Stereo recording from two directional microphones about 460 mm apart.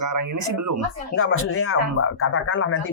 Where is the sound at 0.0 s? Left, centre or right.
Right.